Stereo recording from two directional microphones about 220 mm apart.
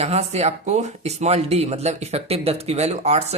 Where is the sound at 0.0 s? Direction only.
30° right (ahead or behind).